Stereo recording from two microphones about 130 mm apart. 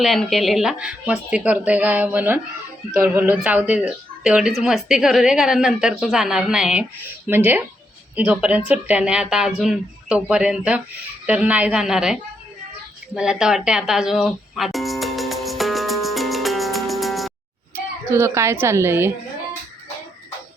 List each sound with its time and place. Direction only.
0.0 s a woman's voice: centre (ahead or behind)
7.3 s a woman's voice: 15° right (ahead or behind)
13.1 s music: 5° right (ahead or behind)
18.1 s a woman's voice: 20° right (ahead or behind)